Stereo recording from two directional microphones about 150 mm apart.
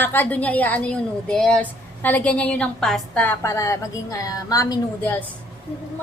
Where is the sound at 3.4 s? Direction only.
20° left (ahead or behind).